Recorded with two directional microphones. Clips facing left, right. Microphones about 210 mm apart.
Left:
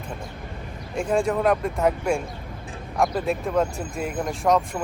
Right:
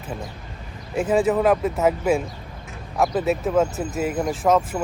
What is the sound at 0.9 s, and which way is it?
Speech, 5° right (ahead or behind).